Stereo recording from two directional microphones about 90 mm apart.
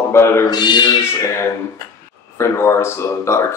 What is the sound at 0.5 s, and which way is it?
Speech, 50° left (ahead or behind).